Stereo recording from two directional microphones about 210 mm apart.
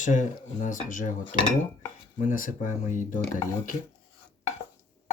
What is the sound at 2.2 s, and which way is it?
Speech, 40° left (ahead or behind).